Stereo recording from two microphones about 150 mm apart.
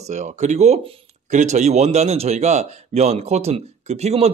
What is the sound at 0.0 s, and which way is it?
Speech, 50° right (ahead or behind).